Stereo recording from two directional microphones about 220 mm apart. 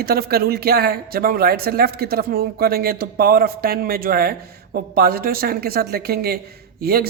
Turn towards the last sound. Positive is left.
turn(degrees=-45)  # may be behind; listen again after turning